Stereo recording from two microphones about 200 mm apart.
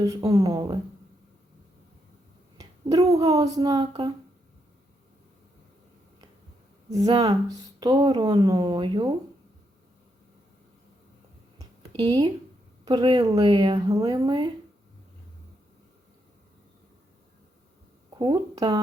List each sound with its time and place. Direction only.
0.0 s speech: 15° right (ahead or behind)
2.6 s speech: 20° right (ahead or behind)
6.9 s a woman's voice: 20° right (ahead or behind)
11.9 s a woman's voice: 25° right (ahead or behind)
18.2 s a woman's voice: 20° right (ahead or behind)